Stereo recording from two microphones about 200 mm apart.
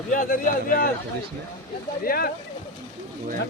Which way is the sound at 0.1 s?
40° left (ahead or behind).